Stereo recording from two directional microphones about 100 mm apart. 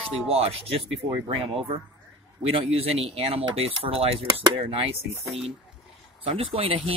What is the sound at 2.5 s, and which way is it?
Speech, 75° right (ahead or behind).